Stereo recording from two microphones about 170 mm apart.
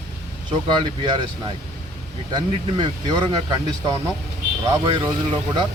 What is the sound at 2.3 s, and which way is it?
Speech, 25° right (ahead or behind).